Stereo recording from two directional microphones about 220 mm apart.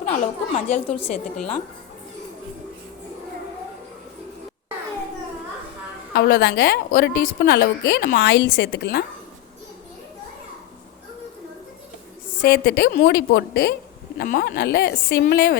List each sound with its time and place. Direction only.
0.0 s a woman's voice: 30° left (ahead or behind)
6.1 s a woman's voice: 50° left (ahead or behind)
12.5 s a woman's voice: 45° left (ahead or behind)